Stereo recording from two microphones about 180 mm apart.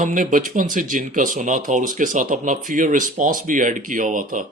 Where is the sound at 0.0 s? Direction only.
45° right (ahead or behind).